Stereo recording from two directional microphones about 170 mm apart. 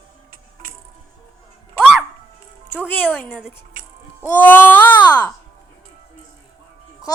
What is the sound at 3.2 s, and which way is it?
Speech, centre (ahead or behind).